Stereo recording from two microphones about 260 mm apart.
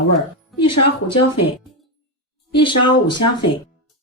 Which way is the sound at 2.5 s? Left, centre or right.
Centre.